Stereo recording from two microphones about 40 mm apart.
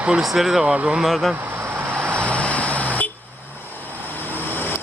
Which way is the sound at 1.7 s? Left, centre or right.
Right.